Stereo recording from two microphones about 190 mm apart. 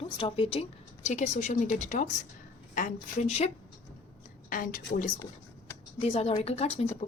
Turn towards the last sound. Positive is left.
turn(degrees=35)  # may be behind; listen again after turning